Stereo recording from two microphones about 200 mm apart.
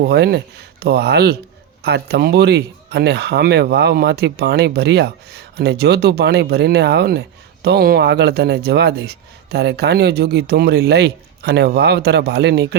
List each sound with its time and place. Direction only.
0.0 s speech: 55° right (ahead or behind)